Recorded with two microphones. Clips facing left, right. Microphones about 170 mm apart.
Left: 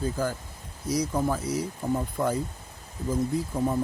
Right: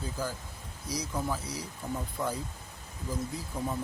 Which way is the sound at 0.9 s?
50° left (ahead or behind).